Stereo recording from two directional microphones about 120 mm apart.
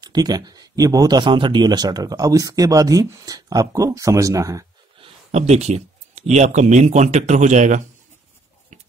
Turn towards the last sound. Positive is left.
turn(degrees=-85)